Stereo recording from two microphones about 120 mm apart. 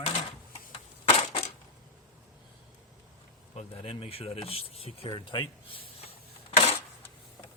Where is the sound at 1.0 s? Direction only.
50° left (ahead or behind).